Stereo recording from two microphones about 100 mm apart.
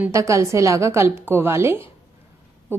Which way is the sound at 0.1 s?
30° right (ahead or behind).